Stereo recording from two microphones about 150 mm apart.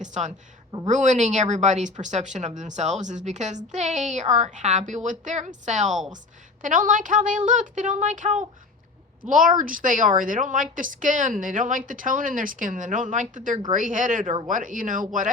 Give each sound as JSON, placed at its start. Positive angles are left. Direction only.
{"t": 0.0, "sound": "a woman's voice", "side_deg": -50}